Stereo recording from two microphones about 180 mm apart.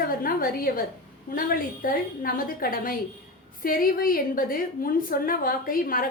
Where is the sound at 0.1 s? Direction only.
50° left (ahead or behind).